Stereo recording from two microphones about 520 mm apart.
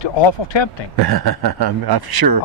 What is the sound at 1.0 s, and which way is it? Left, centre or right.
A man's voice, right.